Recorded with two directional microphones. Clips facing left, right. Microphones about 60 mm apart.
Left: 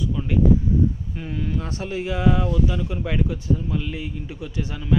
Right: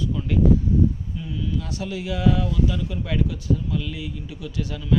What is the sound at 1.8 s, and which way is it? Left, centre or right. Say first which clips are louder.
Speech: left 1 dB; left.